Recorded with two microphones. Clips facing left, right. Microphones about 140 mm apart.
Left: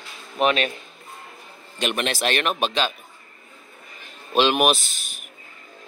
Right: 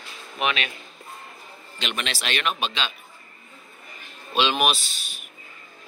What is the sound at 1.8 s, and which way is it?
Speech, 50° left (ahead or behind).